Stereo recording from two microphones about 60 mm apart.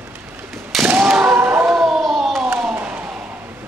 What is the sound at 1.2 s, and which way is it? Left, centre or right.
Thump, right.